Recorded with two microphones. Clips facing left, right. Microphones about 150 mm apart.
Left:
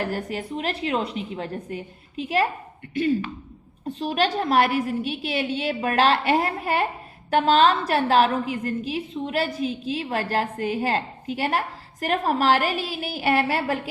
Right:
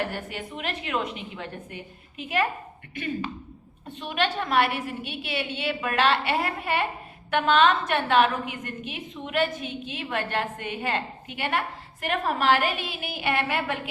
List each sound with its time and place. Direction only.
0.0 s a woman's voice: 35° left (ahead or behind)
3.8 s a woman's voice: 35° left (ahead or behind)